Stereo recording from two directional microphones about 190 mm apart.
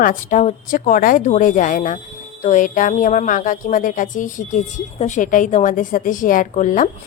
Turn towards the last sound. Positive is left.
turn(degrees=45)  # may be behind; listen again after turning